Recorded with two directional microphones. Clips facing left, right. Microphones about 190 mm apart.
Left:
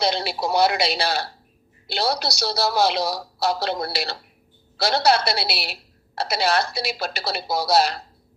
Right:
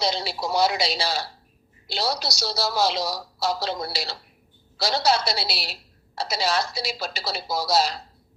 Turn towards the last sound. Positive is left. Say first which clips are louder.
# left 3 dB
turn(degrees=60)  # may be behind; listen again after turning